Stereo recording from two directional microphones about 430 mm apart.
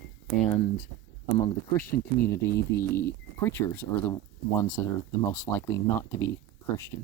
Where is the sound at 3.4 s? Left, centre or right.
Centre.